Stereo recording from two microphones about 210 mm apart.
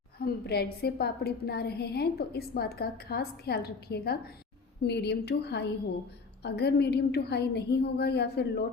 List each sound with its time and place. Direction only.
0.2 s a woman's voice: 50° left (ahead or behind)